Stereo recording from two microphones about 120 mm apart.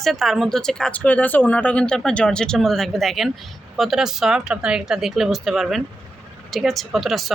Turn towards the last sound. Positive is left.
turn(degrees=0)  # may be behind; listen again after turning